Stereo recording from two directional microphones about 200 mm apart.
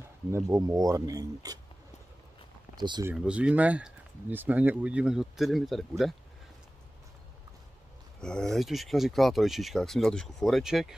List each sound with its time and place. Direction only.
0.3 s speech: 15° right (ahead or behind)
2.8 s speech: 20° right (ahead or behind)
3.2 s speech: 5° right (ahead or behind)
8.2 s speech: 5° left (ahead or behind)